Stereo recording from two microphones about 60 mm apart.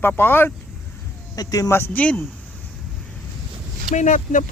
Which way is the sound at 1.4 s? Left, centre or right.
Left.